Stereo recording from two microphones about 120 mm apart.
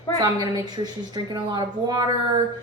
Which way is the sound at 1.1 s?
35° right (ahead or behind).